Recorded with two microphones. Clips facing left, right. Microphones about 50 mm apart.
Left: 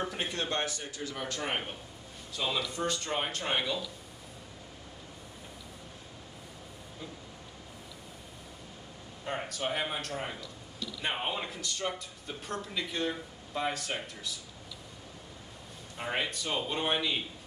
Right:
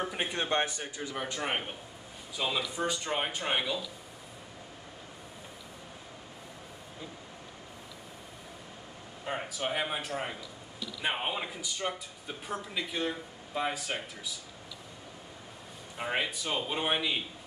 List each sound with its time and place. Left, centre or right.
0.0 s a man's voice: centre
9.2 s speech: centre
16.0 s speech: centre